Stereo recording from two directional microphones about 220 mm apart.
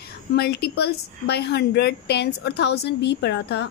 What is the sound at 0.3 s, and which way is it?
Speech, 45° left (ahead or behind).